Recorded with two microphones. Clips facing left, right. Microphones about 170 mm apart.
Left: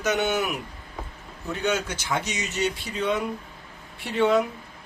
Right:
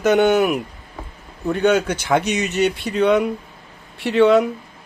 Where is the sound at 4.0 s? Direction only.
85° right.